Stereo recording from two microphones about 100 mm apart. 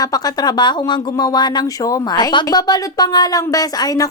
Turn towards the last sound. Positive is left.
turn(degrees=40)  # may be behind; listen again after turning